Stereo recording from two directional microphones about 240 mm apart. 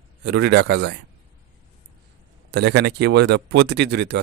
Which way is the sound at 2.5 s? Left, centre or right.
Right.